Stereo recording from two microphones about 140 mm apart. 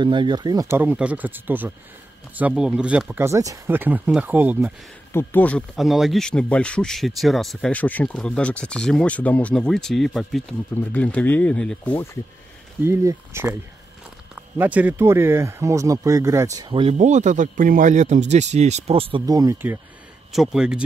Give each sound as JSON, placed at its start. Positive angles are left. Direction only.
{"t": 0.0, "sound": "speech", "side_deg": -35}
{"t": 0.7, "sound": "speech", "side_deg": -15}
{"t": 3.3, "sound": "speech", "side_deg": -20}
{"t": 5.1, "sound": "speech", "side_deg": 10}
{"t": 5.8, "sound": "speech", "side_deg": 0}
{"t": 12.8, "sound": "speech", "side_deg": -20}
{"t": 16.9, "sound": "speech", "side_deg": -60}
{"t": 19.2, "sound": "speech", "side_deg": -25}
{"t": 20.3, "sound": "speech", "side_deg": -5}